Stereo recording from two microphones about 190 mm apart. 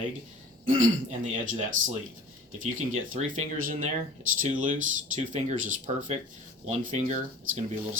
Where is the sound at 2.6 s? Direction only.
40° right (ahead or behind).